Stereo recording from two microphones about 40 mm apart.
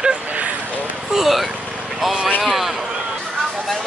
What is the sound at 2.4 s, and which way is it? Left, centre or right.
Speech, centre.